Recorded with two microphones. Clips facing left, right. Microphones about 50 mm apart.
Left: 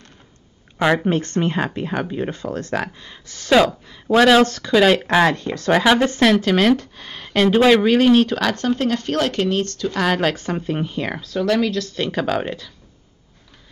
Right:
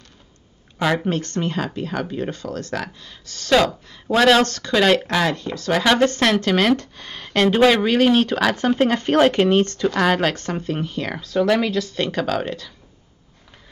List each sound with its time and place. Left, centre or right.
0.9 s speech: centre
1.2 s speech: left
3.5 s speech: centre
5.0 s speech: left
5.7 s speech: centre; by 9.8 s right
9.9 s speech: centre
10.3 s speech: centre
11.1 s speech: centre
12.1 s speech: centre